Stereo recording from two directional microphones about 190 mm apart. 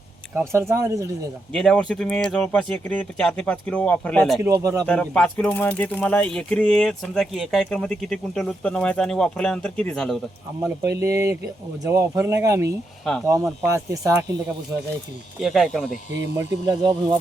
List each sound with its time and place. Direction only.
0.7 s speech: 15° right (ahead or behind)
1.5 s speech: 5° left (ahead or behind)
4.4 s speech: 15° right (ahead or behind)
4.9 s speech: 5° left (ahead or behind)
10.6 s speech: 15° right (ahead or behind)
15.4 s speech: centre (ahead or behind)
16.6 s speech: 20° right (ahead or behind)